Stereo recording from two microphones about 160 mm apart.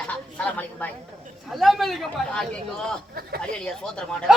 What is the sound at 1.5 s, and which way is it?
A man's voice, centre (ahead or behind).